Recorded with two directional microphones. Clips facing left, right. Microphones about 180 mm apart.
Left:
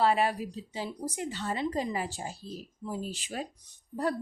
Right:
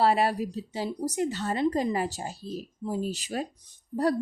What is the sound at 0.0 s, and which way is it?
Speech, 35° right (ahead or behind).